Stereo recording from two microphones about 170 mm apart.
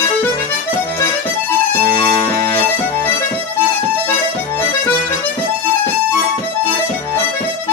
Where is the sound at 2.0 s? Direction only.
15° left (ahead or behind).